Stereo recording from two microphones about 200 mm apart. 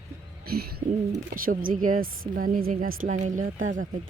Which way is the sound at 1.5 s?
45° right (ahead or behind).